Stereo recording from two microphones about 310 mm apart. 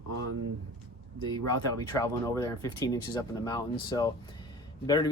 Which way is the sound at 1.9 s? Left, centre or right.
Centre.